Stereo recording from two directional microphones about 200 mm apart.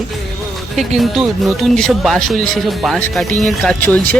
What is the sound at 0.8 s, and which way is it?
Speech, centre (ahead or behind).